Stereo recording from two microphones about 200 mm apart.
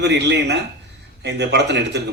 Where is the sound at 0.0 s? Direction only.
60° right (ahead or behind).